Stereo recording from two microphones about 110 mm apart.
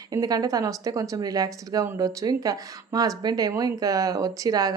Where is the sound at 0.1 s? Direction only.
35° right (ahead or behind).